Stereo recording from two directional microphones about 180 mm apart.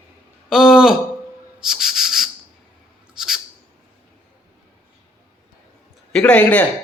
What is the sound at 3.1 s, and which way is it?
Owl, 5° right (ahead or behind).